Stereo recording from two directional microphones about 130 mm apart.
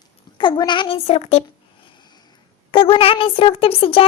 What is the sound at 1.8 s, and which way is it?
Snoring, 35° left (ahead or behind).